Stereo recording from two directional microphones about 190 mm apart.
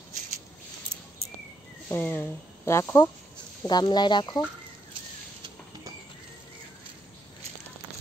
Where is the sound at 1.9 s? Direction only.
10° left (ahead or behind).